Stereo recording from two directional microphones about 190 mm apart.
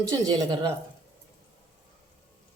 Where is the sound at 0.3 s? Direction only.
20° right (ahead or behind).